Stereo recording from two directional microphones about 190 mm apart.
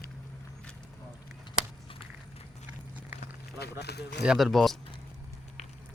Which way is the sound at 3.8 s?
60° left (ahead or behind).